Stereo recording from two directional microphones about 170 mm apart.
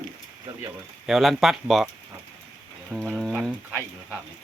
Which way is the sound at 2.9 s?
5° right (ahead or behind).